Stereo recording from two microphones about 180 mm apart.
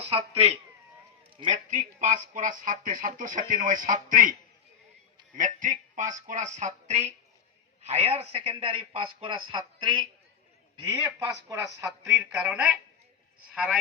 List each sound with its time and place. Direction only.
0.0 s speech: 35° right (ahead or behind)
1.7 s speech: 45° right (ahead or behind)
5.4 s a man's voice: 45° right (ahead or behind); by 13.7 s centre (ahead or behind)